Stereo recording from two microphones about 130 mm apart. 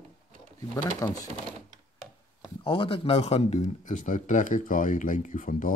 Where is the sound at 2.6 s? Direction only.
45° left (ahead or behind).